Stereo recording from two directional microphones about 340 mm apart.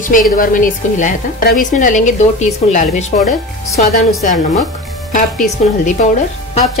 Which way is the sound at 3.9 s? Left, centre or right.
Centre.